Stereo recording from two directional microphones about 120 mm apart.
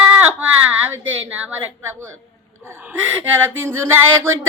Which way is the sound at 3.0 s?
15° right (ahead or behind).